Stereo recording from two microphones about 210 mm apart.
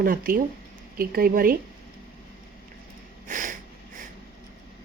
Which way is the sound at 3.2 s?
40° right (ahead or behind).